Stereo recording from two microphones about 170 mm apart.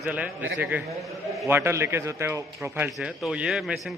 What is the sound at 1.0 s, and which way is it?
Speech, centre (ahead or behind).